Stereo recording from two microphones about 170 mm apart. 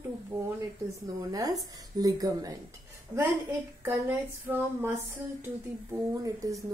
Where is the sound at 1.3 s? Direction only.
20° right (ahead or behind).